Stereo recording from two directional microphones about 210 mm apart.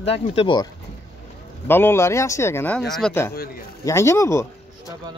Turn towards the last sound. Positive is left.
turn(degrees=15)  # may be behind; listen again after turning